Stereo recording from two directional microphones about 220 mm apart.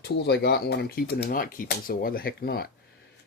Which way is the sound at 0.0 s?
50° left (ahead or behind).